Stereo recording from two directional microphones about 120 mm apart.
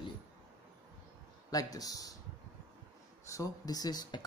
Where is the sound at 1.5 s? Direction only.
30° left (ahead or behind).